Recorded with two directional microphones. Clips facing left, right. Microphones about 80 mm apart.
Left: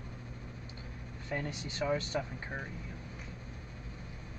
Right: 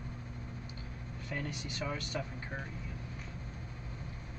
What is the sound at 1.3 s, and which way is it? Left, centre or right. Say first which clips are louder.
Speech: left 2 dB; left.